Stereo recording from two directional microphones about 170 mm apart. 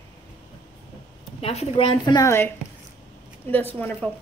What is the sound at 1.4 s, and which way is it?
Speech, 35° left (ahead or behind).